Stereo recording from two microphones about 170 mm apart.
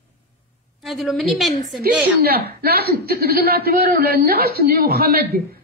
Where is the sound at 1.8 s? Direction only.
65° right (ahead or behind).